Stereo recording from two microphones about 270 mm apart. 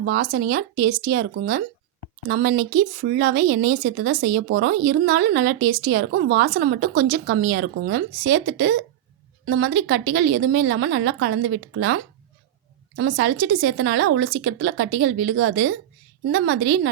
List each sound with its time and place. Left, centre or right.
0.0 s speech: right
13.0 s speech: right